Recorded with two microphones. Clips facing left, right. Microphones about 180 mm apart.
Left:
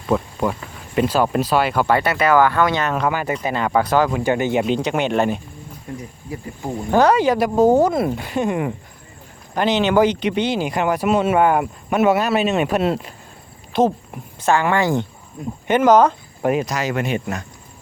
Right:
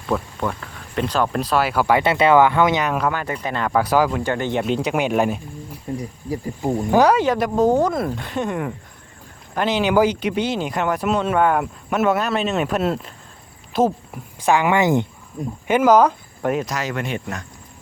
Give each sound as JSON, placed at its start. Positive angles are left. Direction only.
{"t": 0.3, "sound": "speech", "side_deg": 10}
{"t": 2.0, "sound": "speech", "side_deg": -25}
{"t": 3.1, "sound": "speech", "side_deg": 10}
{"t": 3.8, "sound": "speech", "side_deg": -5}
{"t": 4.1, "sound": "speech", "side_deg": 10}
{"t": 6.0, "sound": "speech", "side_deg": -35}
{"t": 6.6, "sound": "speech", "side_deg": -15}
{"t": 7.2, "sound": "speech", "side_deg": 0}
{"t": 14.4, "sound": "speech", "side_deg": -15}
{"t": 15.6, "sound": "speech", "side_deg": -5}
{"t": 16.4, "sound": "speech", "side_deg": 5}